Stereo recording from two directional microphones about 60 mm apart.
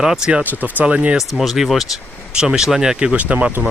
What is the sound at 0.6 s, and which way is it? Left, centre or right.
Speech, right.